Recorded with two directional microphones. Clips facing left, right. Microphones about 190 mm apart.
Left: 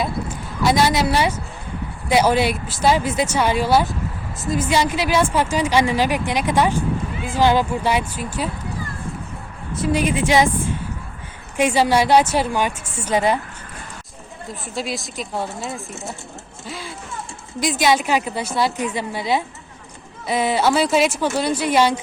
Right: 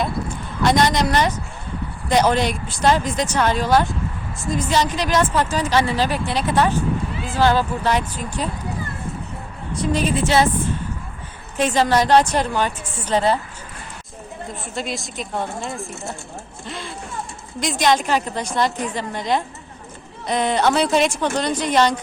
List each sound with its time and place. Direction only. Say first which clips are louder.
0.6 s speech: even; 5° left (ahead or behind)
9.7 s speech: left 1 dB; 5° left (ahead or behind)
14.8 s speech: left 1 dB; centre (ahead or behind)
16.6 s a sound: even; centre (ahead or behind)
17.6 s speech: even; 5° left (ahead or behind)